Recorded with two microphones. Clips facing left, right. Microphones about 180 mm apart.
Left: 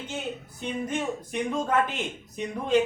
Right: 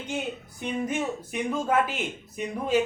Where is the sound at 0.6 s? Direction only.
5° right (ahead or behind).